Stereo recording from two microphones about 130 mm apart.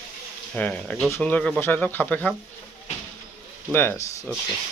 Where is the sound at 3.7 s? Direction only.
15° left (ahead or behind).